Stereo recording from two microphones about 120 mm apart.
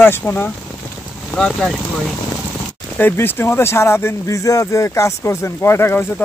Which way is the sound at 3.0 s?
15° left (ahead or behind).